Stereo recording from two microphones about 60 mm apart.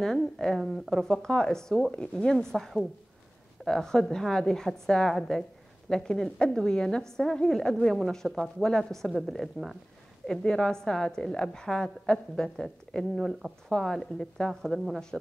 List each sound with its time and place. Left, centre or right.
0.0 s a woman's voice: centre
2.3 s a woman's voice: centre